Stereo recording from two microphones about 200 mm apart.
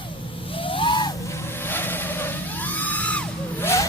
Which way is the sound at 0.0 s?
25° left (ahead or behind).